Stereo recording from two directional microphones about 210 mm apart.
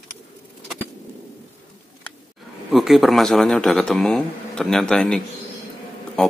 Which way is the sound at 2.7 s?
Centre (ahead or behind).